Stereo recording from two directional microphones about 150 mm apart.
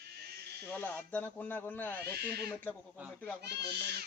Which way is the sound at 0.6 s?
15° left (ahead or behind).